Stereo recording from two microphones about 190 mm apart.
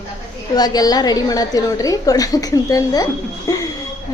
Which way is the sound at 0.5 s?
20° left (ahead or behind).